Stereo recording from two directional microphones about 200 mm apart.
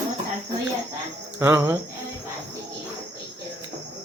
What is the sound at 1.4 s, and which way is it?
Speech, 10° right (ahead or behind).